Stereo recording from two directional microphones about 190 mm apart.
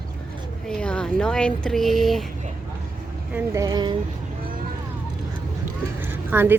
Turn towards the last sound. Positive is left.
turn(degrees=-10)  # may be behind; listen again after turning